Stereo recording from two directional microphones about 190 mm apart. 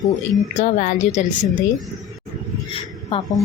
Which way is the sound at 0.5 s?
40° left (ahead or behind).